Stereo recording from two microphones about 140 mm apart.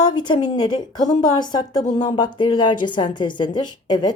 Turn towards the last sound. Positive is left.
turn(degrees=30)  # may be behind; listen again after turning